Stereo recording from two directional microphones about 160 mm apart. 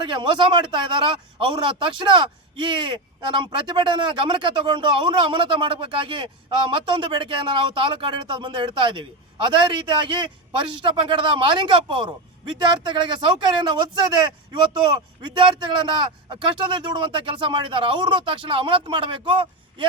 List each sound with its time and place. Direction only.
0.1 s a man's voice: 30° right (ahead or behind)